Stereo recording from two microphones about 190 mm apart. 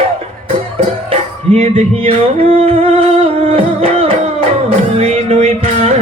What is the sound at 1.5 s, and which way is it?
Music, 30° right (ahead or behind).